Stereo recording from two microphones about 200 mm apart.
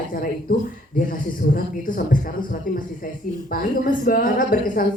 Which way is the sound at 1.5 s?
45° left (ahead or behind).